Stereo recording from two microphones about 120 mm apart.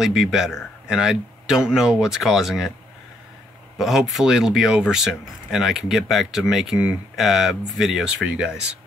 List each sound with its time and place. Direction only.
0.0 s speech: 5° right (ahead or behind)
3.7 s speech: 5° right (ahead or behind)